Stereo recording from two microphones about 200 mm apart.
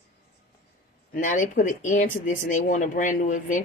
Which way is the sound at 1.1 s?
40° left (ahead or behind).